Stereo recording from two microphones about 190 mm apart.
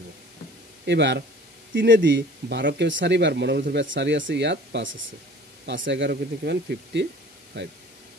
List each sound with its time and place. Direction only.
0.8 s speech: 65° right (ahead or behind)